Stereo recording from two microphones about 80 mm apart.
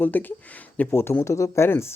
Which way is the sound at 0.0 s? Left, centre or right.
Left.